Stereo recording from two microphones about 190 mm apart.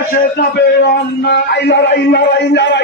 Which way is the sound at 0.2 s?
60° left (ahead or behind).